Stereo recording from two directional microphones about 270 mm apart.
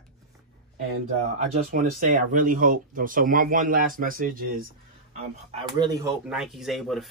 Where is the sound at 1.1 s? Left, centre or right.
Right.